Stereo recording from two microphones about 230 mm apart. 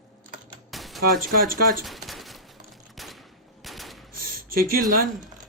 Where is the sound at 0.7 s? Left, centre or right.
Centre.